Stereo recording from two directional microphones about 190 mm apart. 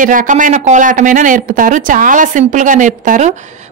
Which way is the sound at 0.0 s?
45° right (ahead or behind).